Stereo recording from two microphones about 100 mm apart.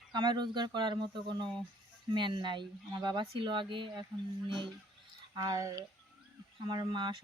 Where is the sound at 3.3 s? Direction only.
60° right (ahead or behind).